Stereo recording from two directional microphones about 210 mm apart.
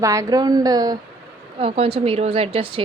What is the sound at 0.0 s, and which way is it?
A woman's voice, 15° right (ahead or behind).